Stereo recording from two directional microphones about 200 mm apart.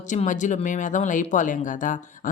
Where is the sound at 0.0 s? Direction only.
40° left (ahead or behind).